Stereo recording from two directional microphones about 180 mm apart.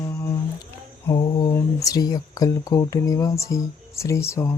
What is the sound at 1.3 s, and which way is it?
Speech, 20° left (ahead or behind).